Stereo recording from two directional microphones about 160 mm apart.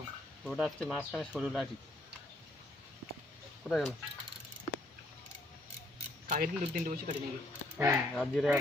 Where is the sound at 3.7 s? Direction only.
5° left (ahead or behind).